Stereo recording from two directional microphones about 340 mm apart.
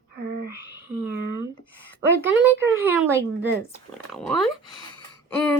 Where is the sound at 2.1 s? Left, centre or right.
Centre.